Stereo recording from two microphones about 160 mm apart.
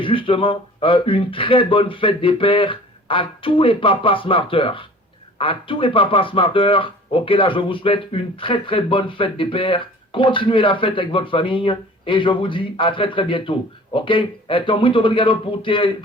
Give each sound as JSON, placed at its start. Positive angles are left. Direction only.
{"t": 0.0, "sound": "speech", "side_deg": 30}